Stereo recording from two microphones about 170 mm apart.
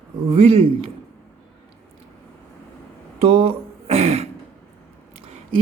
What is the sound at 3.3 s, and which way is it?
Throat clearing, 35° right (ahead or behind).